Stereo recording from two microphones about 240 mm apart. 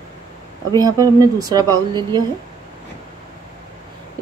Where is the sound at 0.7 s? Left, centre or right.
Centre.